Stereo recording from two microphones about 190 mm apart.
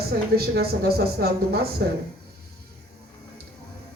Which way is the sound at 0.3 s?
55° right (ahead or behind).